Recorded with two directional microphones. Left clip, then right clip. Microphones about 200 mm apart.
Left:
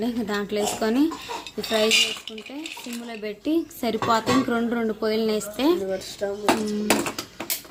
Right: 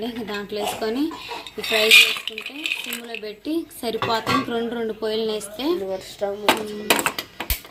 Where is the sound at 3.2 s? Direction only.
15° left (ahead or behind).